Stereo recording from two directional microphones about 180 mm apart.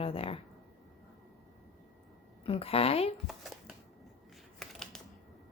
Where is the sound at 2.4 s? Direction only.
30° left (ahead or behind).